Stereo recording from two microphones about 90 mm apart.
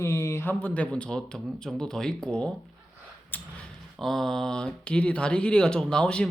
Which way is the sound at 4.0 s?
5° left (ahead or behind).